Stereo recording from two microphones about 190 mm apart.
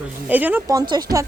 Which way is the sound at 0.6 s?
20° right (ahead or behind).